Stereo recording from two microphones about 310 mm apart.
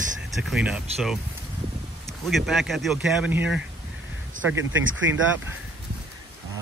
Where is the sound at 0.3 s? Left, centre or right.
Centre.